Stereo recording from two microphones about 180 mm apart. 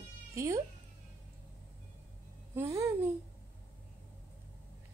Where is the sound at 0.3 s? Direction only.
15° right (ahead or behind).